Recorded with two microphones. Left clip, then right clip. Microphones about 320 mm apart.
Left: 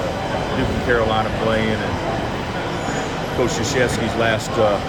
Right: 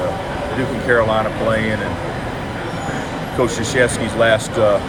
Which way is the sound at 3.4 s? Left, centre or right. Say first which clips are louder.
Right 4 dB; centre.